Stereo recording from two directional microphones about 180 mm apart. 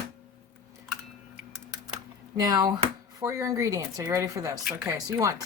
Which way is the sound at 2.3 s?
20° right (ahead or behind).